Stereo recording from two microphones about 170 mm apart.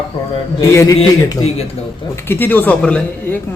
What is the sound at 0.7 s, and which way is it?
Speech, 15° left (ahead or behind).